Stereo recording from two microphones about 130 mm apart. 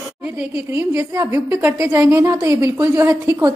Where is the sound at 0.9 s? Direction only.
20° right (ahead or behind).